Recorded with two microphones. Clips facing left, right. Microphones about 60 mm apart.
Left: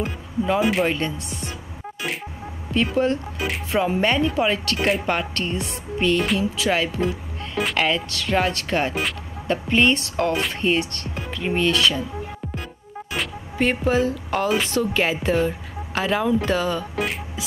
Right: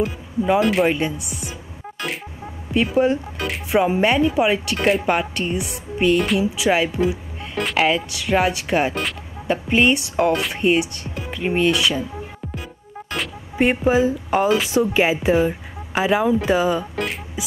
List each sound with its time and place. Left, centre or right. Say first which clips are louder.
0.6 s speech: right 2 dB; centre
0.8 s speech: right 3 dB; centre
2.7 s speech: right 3 dB; centre
3.4 s music: right 4 dB; centre
3.8 s speech: right 2 dB; centre
13.6 s speech: right 3 dB; centre
17.4 s beatboxing: right 2 dB; centre